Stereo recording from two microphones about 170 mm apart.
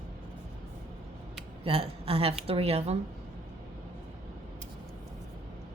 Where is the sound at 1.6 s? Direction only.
35° right (ahead or behind).